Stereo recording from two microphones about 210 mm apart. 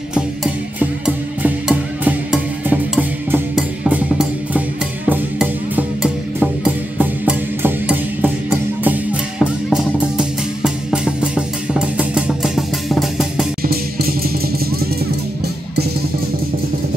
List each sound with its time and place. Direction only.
0.1 s music: 5° right (ahead or behind)
13.6 s music: 45° right (ahead or behind)